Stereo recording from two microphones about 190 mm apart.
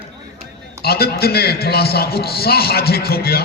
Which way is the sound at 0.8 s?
55° left (ahead or behind).